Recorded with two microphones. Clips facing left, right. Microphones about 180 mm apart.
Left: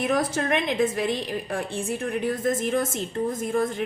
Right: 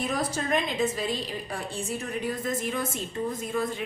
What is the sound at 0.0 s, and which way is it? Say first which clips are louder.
A woman's voice: left 5 dB; 55° left (ahead or behind).